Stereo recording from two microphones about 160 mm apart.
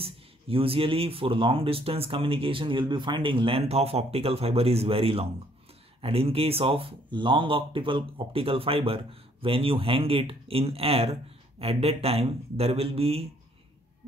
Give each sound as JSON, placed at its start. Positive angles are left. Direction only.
{"t": 0.0, "sound": "speech", "side_deg": -35}